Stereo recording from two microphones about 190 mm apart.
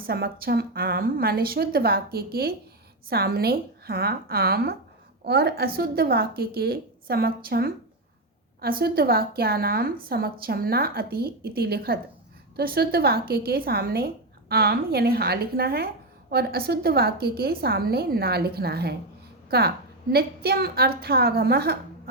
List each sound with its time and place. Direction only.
0.0 s a woman's voice: 55° right (ahead or behind)